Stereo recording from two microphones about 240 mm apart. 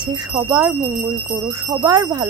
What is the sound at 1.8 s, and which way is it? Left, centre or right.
Speech, centre.